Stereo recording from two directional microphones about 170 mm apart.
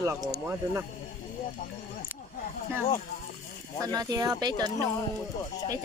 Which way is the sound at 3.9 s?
20° right (ahead or behind).